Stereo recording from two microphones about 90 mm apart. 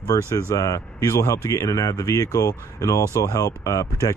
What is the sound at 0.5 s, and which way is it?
Speech, 35° left (ahead or behind).